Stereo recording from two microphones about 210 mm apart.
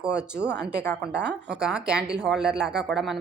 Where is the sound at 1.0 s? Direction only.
50° right (ahead or behind).